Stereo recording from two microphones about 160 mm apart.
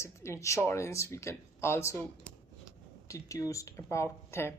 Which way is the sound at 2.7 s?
20° left (ahead or behind).